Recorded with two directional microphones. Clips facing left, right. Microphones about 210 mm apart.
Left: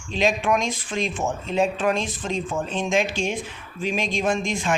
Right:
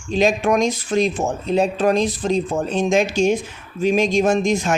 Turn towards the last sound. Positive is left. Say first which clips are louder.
# right 6 dB
turn(degrees=-40)  # may be behind; listen again after turning